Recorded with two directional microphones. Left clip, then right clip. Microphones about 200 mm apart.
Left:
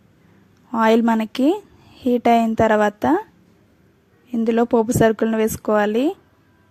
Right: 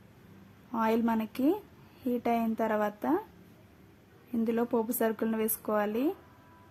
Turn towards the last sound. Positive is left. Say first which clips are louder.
# left 12 dB
turn(degrees=40)  # may be behind; listen again after turning